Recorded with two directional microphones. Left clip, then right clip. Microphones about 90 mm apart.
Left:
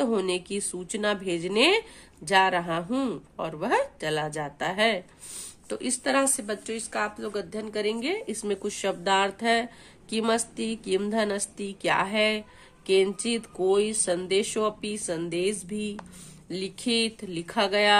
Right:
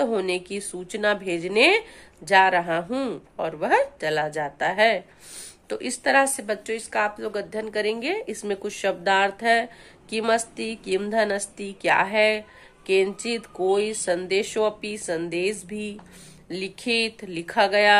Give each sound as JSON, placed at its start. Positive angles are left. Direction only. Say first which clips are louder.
{"t": 0.0, "sound": "a woman's voice", "louder": "right 3 dB", "side_deg": 40}